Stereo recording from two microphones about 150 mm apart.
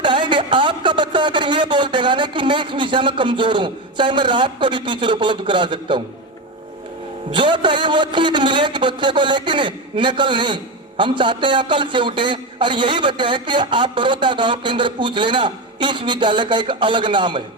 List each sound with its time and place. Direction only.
0.0 s speech: 30° right (ahead or behind)
7.3 s a man's voice: 30° right (ahead or behind)